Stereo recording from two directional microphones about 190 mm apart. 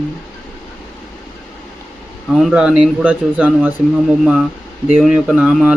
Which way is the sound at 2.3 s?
5° right (ahead or behind).